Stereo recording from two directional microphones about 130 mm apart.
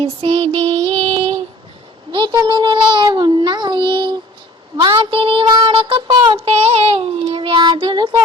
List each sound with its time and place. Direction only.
0.0 s child singing: 50° right (ahead or behind)
2.1 s child singing: 35° right (ahead or behind)